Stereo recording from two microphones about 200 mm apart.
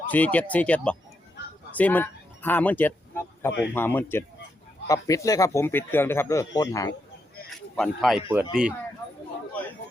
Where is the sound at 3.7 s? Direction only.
10° left (ahead or behind).